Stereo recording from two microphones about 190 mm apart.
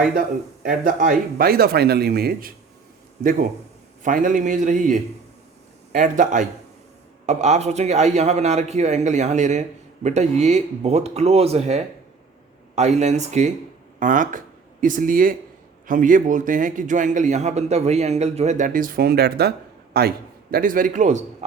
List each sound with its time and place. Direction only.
0.1 s speech: 45° right (ahead or behind)
4.0 s a man's voice: 45° right (ahead or behind)